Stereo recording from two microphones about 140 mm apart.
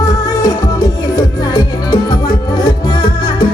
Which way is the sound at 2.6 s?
30° left (ahead or behind).